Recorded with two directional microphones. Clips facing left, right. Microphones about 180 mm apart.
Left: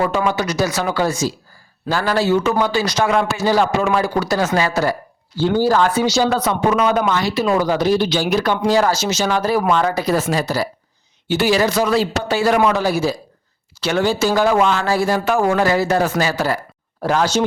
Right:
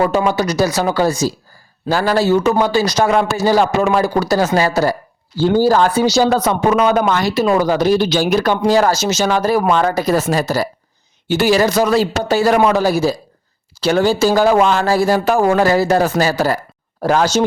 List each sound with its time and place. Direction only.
0.3 s speech: 35° right (ahead or behind)